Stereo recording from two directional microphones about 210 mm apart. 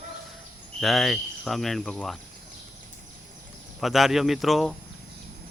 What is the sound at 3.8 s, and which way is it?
Speech, centre (ahead or behind).